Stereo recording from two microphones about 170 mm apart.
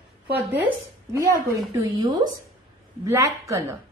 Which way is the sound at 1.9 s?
25° right (ahead or behind).